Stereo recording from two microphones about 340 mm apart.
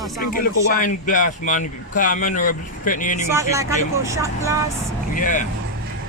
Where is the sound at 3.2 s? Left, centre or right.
Centre.